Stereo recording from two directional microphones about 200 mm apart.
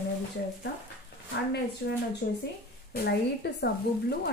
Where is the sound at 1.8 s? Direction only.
55° left (ahead or behind).